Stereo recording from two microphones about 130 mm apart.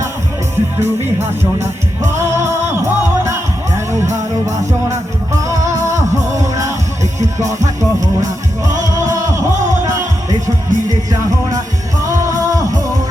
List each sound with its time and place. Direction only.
0.5 s music: 20° right (ahead or behind)